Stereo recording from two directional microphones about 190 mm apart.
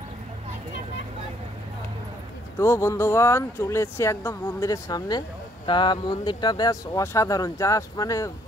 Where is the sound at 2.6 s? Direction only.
15° left (ahead or behind).